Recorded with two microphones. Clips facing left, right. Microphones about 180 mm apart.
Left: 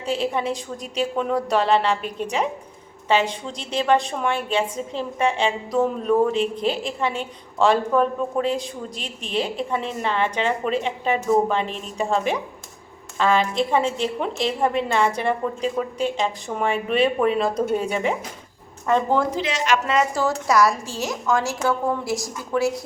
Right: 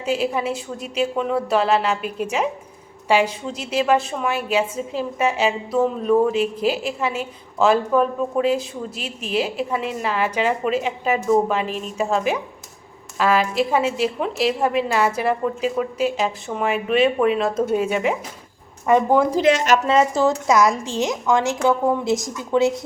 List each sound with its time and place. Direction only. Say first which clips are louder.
0.0 s a woman's voice: right 2 dB; 5° right (ahead or behind)
18.9 s a woman's voice: right 4 dB; 15° right (ahead or behind)
19.4 s a woman's voice: right 6 dB; 50° right (ahead or behind)
19.9 s a woman's voice: right 4 dB; 30° right (ahead or behind)
20.2 s a woman's voice: right 2 dB; 20° right (ahead or behind)